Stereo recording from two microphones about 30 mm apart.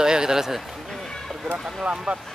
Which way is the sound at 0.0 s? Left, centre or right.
Right.